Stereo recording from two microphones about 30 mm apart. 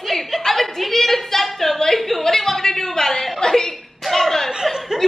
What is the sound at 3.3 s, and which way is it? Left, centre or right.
Speech, left.